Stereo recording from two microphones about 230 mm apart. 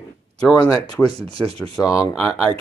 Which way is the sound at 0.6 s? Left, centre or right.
Centre.